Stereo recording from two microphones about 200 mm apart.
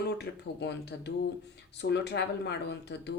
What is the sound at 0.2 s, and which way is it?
Speech, 60° left (ahead or behind).